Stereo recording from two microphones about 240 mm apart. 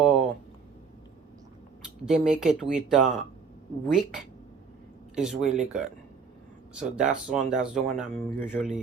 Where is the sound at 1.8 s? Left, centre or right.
Centre.